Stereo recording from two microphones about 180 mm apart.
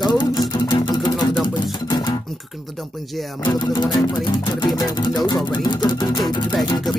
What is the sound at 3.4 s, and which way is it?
Speech, 25° left (ahead or behind).